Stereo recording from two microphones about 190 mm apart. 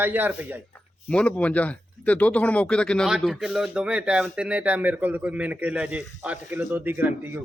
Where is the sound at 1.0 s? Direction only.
5° left (ahead or behind); by 7.4 s 10° right (ahead or behind).